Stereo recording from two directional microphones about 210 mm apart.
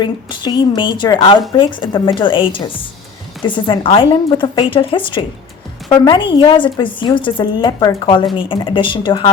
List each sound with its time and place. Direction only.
0.0 s a woman's voice: 20° left (ahead or behind)